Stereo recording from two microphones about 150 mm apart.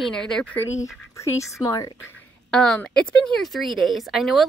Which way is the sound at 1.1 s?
20° left (ahead or behind).